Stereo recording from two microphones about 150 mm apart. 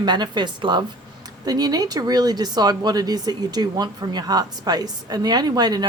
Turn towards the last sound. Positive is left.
turn(degrees=-25)  # may be behind; listen again after turning